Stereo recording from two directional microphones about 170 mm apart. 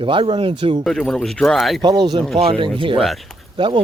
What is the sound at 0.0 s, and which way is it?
Speech, 30° right (ahead or behind).